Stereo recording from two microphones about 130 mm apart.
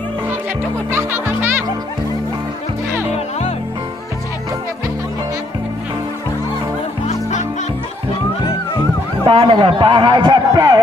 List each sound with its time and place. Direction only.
0.9 s speech: 20° right (ahead or behind)
7.1 s music: 65° left (ahead or behind)
9.2 s speech: 40° right (ahead or behind)